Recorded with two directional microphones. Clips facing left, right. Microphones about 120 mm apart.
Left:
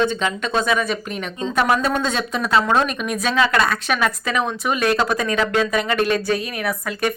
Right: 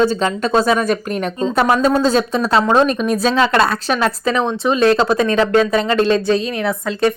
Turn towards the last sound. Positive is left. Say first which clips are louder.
# right 5 dB
turn(degrees=-25)  # may be behind; listen again after turning